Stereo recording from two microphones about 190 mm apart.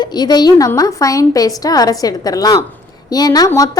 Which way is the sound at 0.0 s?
20° left (ahead or behind).